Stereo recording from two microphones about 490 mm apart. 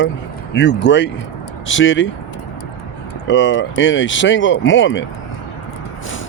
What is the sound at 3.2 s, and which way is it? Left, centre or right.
Speech, left.